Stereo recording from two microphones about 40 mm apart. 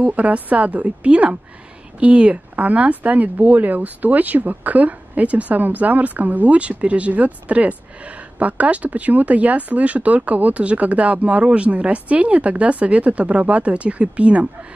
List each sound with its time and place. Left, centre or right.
0.0 s speech: right